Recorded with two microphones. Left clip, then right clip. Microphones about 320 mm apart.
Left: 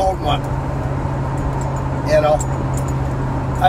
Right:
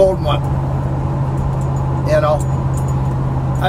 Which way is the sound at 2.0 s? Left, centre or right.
Centre.